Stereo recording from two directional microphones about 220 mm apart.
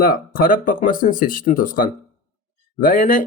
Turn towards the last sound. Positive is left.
turn(degrees=40)  # may be behind; listen again after turning